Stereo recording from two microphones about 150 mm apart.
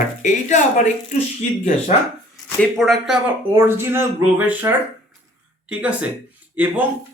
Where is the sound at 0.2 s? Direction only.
55° left (ahead or behind).